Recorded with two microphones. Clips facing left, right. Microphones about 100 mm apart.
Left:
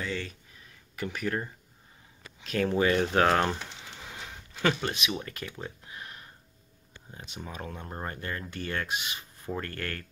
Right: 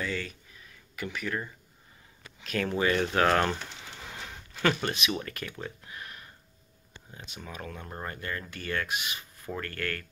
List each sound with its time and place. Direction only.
0.0 s speech: 25° left (ahead or behind)
0.9 s speech: 35° left (ahead or behind)
2.4 s speech: 25° left (ahead or behind)
4.1 s a sound: 10° left (ahead or behind)
4.8 s speech: 20° left (ahead or behind)
7.2 s speech: 30° left (ahead or behind)